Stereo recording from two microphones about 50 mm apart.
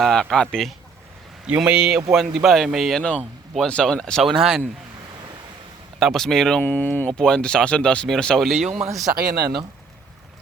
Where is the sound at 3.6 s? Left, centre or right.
Centre.